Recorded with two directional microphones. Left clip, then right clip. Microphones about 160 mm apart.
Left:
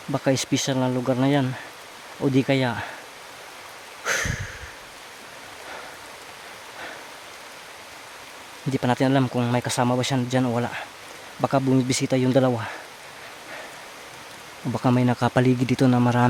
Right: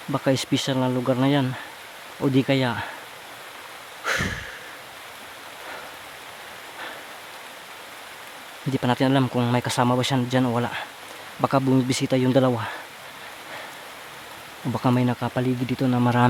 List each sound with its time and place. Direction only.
0.1 s speech: centre (ahead or behind)
4.0 s a sound: centre (ahead or behind)
8.7 s speech: 5° left (ahead or behind)
14.7 s speech: 5° left (ahead or behind)
15.1 s speech: 25° left (ahead or behind)
16.0 s speech: centre (ahead or behind)